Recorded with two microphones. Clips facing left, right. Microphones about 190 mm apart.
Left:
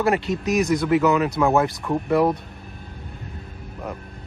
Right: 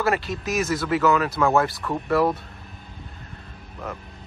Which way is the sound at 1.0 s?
15° left (ahead or behind).